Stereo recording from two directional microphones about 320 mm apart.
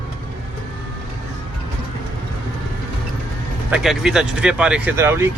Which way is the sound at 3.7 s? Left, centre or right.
Centre.